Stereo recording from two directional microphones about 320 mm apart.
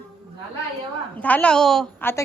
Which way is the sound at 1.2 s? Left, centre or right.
Centre.